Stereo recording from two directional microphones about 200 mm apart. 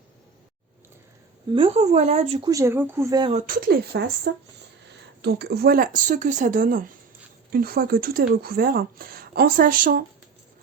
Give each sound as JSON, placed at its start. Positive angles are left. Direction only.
{"t": 1.5, "sound": "speech", "side_deg": -30}
{"t": 2.5, "sound": "speech", "side_deg": -15}
{"t": 3.3, "sound": "speech", "side_deg": -45}